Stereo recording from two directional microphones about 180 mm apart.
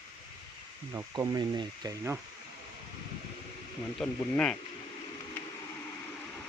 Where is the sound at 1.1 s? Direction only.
20° right (ahead or behind).